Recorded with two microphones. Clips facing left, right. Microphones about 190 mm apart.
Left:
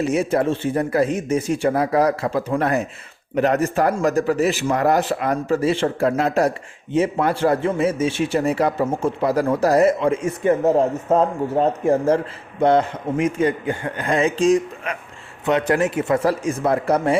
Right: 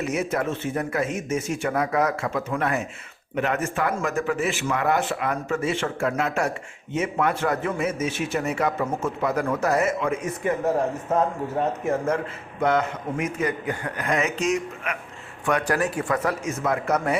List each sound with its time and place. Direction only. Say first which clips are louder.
0.0 s a man's voice: left 6 dB; 30° left (ahead or behind)